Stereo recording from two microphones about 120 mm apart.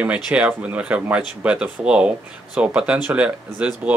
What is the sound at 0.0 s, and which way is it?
Speech, 10° right (ahead or behind).